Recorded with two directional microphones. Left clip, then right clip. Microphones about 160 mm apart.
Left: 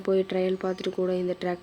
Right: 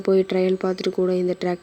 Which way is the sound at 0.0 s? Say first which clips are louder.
Right 6 dB; 30° right (ahead or behind).